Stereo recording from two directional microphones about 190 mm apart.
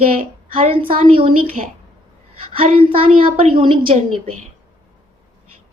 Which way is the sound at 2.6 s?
30° right (ahead or behind).